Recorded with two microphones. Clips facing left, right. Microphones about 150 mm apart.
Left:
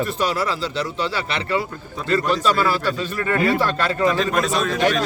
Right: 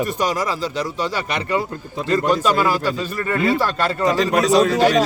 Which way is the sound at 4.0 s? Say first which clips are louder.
Right 2 dB; 40° right (ahead or behind).